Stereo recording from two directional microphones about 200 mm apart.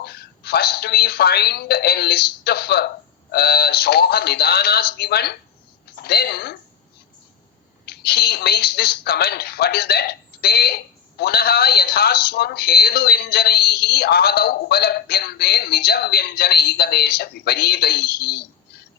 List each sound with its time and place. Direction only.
0.0 s a woman's voice: 55° left (ahead or behind)
7.9 s speech: 55° left (ahead or behind)